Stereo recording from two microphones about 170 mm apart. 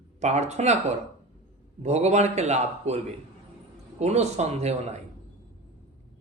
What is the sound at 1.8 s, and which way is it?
Speech, 40° right (ahead or behind).